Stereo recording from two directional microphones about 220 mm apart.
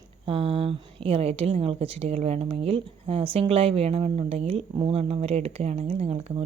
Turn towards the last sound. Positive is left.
turn(degrees=-30)  # may be behind; listen again after turning